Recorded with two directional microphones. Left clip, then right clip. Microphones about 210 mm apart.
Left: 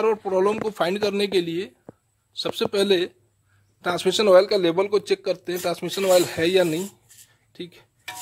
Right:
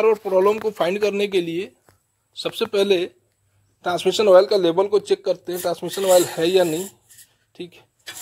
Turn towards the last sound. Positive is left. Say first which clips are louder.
# right 2 dB
turn(degrees=10)  # may be behind; listen again after turning